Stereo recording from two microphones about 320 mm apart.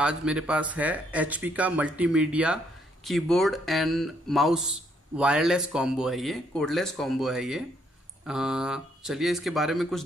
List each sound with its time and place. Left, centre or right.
0.2 s speech: centre